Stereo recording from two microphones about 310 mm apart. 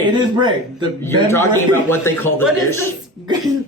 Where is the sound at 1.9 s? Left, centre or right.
Centre.